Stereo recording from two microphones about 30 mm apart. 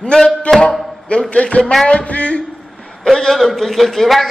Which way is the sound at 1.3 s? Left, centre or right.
Left.